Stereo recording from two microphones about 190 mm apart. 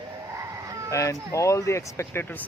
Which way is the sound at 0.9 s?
15° left (ahead or behind).